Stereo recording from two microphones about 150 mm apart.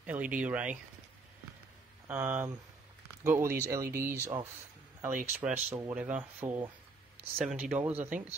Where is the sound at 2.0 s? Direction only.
10° right (ahead or behind).